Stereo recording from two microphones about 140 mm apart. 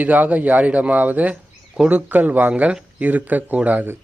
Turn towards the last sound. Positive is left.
turn(degrees=-15)  # may be behind; listen again after turning